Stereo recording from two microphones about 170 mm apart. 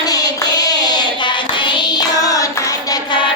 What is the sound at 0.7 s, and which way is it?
Child singing, 25° left (ahead or behind).